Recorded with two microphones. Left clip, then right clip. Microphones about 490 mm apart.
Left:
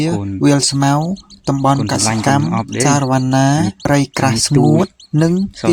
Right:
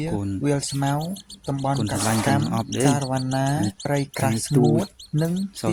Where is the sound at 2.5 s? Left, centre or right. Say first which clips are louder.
Left 7 dB; right.